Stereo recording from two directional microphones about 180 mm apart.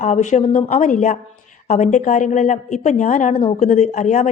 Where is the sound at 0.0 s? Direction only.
40° left (ahead or behind).